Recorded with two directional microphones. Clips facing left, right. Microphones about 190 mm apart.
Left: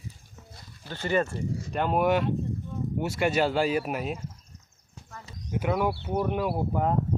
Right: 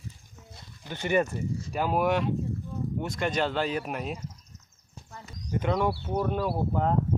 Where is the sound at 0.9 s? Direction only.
15° right (ahead or behind).